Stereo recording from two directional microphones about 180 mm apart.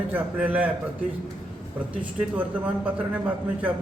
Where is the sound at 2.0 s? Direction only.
10° right (ahead or behind).